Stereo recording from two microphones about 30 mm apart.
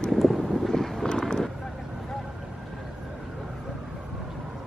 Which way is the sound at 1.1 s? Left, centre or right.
Left.